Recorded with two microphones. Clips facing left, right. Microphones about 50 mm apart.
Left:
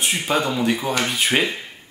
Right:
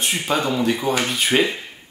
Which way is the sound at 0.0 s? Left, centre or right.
Centre.